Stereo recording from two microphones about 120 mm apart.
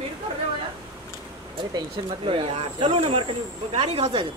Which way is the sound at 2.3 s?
50° right (ahead or behind).